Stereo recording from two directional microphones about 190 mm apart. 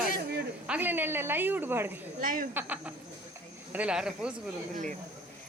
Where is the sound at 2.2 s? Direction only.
45° right (ahead or behind).